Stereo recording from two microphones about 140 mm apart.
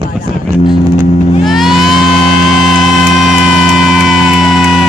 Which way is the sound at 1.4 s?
Centre (ahead or behind).